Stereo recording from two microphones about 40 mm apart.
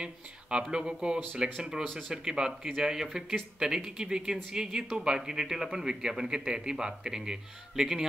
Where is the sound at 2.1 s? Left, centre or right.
Centre.